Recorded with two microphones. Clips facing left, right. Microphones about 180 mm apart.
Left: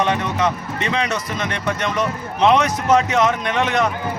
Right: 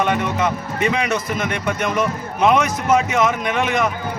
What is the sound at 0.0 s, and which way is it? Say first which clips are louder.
Speech: even; 5° right (ahead or behind).